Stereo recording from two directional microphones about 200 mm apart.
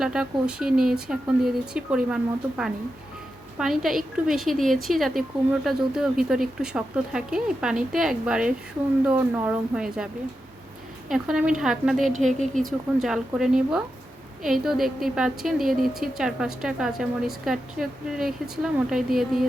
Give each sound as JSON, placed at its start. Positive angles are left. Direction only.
{"t": 0.0, "sound": "a woman's voice", "side_deg": -5}
{"t": 11.1, "sound": "a woman's voice", "side_deg": -5}